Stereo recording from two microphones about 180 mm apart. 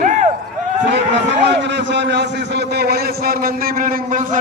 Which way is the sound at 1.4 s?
80° right.